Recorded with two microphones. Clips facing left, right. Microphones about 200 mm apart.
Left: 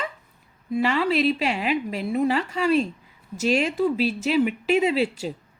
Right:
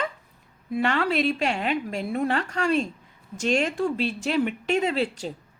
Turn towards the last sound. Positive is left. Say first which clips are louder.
# left 3 dB
turn(degrees=5)  # may be behind; listen again after turning